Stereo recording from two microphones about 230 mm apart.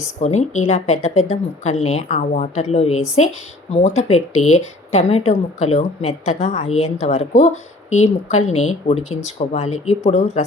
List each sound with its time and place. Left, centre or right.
0.2 s a woman's voice: left